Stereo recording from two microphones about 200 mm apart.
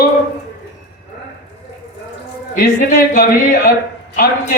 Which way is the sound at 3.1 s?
40° left (ahead or behind).